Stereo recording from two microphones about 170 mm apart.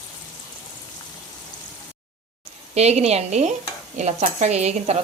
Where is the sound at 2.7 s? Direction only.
40° right (ahead or behind).